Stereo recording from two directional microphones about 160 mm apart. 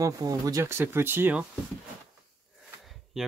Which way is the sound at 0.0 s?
20° right (ahead or behind).